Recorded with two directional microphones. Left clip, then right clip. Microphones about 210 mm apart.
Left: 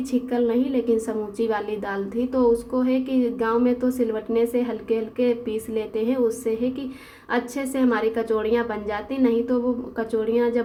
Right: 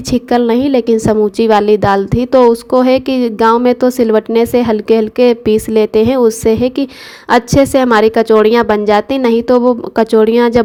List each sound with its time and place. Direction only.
0.1 s a woman's voice: 45° right (ahead or behind)